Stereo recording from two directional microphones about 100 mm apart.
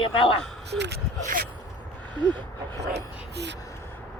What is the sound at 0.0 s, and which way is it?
Speech, 60° left (ahead or behind).